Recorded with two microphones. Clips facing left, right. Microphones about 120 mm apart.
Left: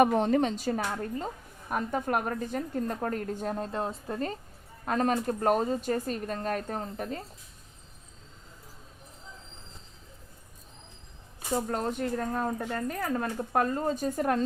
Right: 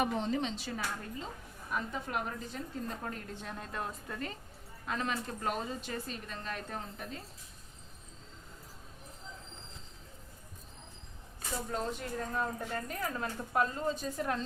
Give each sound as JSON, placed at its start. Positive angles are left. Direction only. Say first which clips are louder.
{"t": 0.0, "sound": "speech", "louder": "left 9 dB", "side_deg": 55}
{"t": 11.5, "sound": "speech", "louder": "left 7 dB", "side_deg": 50}